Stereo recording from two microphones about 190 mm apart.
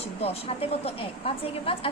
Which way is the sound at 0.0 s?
30° left (ahead or behind).